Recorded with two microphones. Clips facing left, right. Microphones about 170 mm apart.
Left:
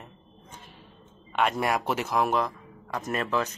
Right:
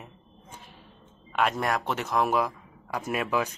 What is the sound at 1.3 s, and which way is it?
A man's voice, centre (ahead or behind).